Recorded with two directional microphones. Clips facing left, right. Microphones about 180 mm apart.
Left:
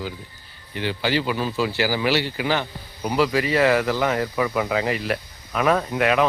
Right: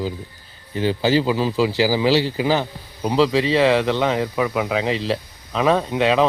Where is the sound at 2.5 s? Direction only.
30° right (ahead or behind).